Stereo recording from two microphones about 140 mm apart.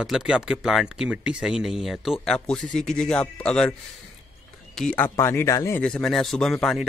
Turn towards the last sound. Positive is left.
turn(degrees=0)  # may be behind; listen again after turning